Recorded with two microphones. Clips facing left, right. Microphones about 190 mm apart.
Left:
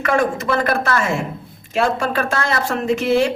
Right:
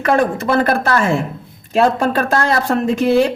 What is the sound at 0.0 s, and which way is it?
Speech, 35° right (ahead or behind).